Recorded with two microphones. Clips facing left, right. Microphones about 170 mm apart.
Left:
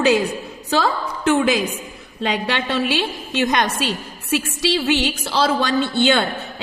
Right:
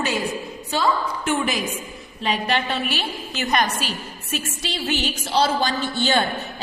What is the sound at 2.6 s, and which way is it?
Speech, 90° left.